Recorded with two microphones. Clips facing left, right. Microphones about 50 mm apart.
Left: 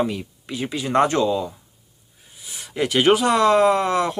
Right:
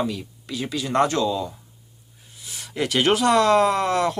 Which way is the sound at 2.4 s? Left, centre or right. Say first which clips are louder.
Left 2 dB; centre.